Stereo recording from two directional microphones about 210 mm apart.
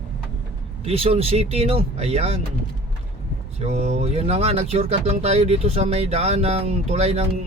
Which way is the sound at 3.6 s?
30° right (ahead or behind).